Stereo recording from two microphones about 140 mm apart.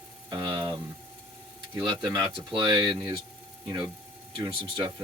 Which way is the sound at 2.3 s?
35° right (ahead or behind).